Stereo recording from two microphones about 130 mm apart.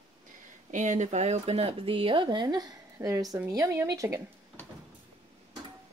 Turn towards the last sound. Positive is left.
turn(degrees=-25)  # may be behind; listen again after turning